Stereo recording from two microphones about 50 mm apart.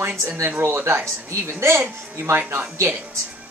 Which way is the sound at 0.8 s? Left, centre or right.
Right.